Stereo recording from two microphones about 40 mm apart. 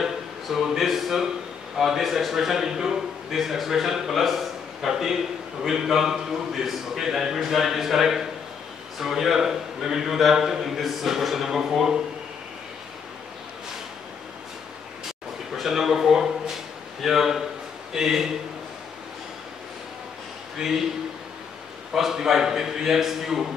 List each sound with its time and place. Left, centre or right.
0.0 s a man's voice: centre
15.5 s a sound: centre
17.0 s a man's voice: centre
20.5 s a man's voice: centre
21.9 s a man's voice: centre